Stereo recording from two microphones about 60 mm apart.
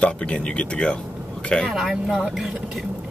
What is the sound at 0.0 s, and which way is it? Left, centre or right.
Speech, centre.